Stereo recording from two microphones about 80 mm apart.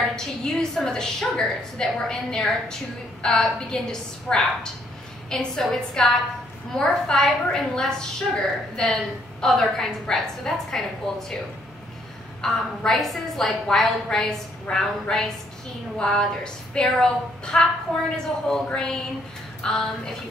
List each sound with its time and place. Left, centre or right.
0.1 s a woman's voice: centre
12.4 s a woman's voice: centre